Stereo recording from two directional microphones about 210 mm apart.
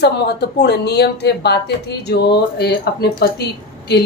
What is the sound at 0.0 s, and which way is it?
A woman's voice, 50° left (ahead or behind).